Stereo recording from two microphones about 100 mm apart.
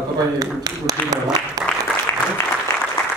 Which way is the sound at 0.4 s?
40° right (ahead or behind).